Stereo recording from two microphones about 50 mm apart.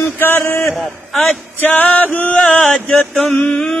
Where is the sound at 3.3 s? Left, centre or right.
Centre.